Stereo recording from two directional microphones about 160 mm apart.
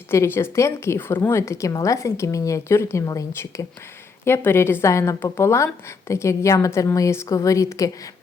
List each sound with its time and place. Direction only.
0.1 s speech: 15° left (ahead or behind)